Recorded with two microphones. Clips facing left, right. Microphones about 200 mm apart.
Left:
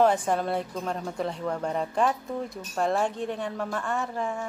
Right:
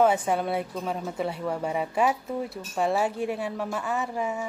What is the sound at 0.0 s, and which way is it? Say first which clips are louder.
Speech: even; 5° right (ahead or behind).